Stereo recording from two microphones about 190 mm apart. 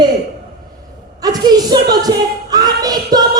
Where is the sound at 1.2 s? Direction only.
20° right (ahead or behind).